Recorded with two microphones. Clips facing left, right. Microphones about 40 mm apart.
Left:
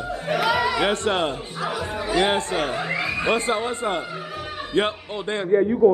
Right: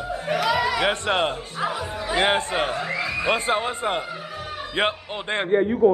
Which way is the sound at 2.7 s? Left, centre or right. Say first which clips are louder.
Left 1 dB; centre.